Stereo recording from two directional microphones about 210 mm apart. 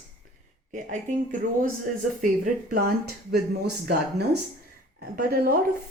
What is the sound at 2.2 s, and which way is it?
A woman's voice, 40° right (ahead or behind).